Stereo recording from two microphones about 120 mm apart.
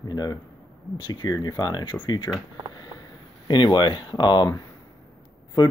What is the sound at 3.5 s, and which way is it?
Speech, 40° left (ahead or behind).